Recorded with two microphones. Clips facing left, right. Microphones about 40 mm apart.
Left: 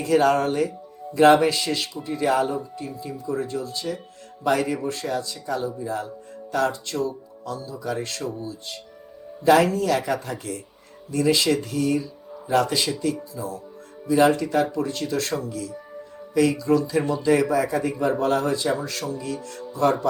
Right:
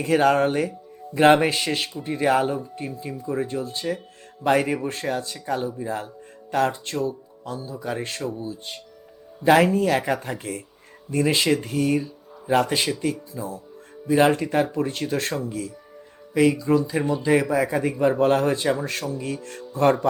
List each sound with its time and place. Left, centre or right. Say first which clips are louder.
0.0 s speech: even; right